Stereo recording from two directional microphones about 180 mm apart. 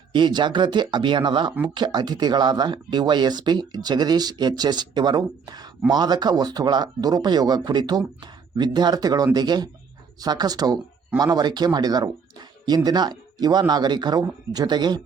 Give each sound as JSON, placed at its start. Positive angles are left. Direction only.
{"t": 0.1, "sound": "speech", "side_deg": -25}